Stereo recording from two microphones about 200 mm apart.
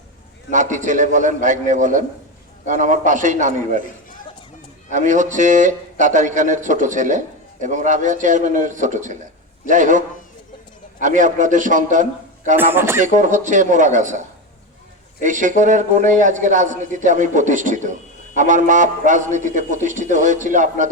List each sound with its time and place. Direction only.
0.5 s a man's voice: 40° right (ahead or behind)
4.9 s a man's voice: 40° right (ahead or behind)
11.0 s a man's voice: 40° right (ahead or behind)
12.5 s a man's voice: 10° right (ahead or behind)
13.1 s a man's voice: 40° right (ahead or behind)
15.2 s a man's voice: 40° right (ahead or behind)